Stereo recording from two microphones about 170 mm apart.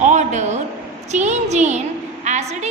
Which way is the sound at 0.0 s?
45° right (ahead or behind).